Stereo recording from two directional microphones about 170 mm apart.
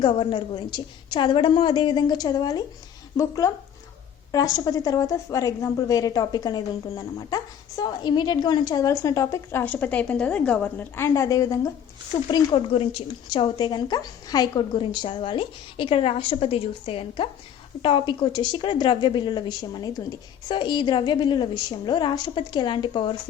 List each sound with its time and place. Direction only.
0.0 s a woman's voice: 30° left (ahead or behind)